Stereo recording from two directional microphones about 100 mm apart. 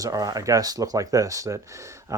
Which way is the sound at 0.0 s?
35° right (ahead or behind).